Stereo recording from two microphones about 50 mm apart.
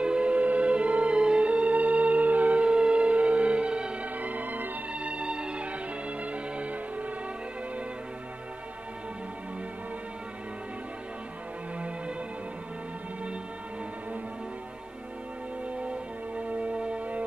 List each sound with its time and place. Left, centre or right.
0.0 s music: right
4.9 s music: right
15.8 s music: right